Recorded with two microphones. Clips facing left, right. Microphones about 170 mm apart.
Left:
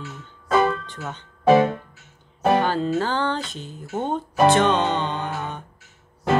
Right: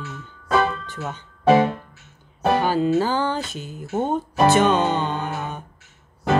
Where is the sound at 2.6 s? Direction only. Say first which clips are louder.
Right 3 dB; 10° right (ahead or behind).